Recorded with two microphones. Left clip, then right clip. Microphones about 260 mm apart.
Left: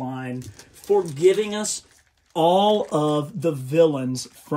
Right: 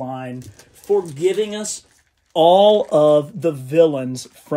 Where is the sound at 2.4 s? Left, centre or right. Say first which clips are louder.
Right 6 dB; right.